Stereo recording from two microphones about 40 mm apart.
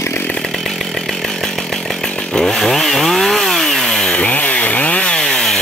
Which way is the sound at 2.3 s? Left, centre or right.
Centre.